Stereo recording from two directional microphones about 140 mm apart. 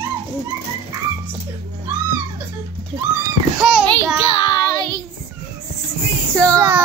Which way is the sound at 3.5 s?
5° right (ahead or behind).